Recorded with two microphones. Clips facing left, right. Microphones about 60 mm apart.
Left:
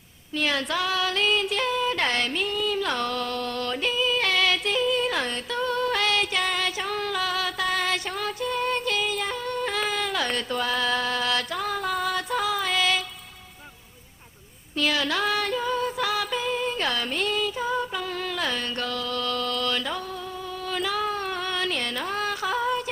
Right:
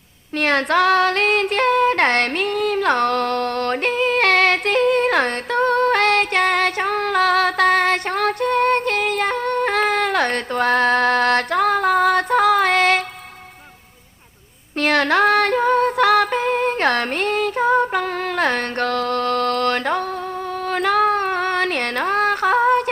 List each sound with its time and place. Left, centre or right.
0.3 s child singing: right
14.8 s female singing: right
20.7 s a sound: right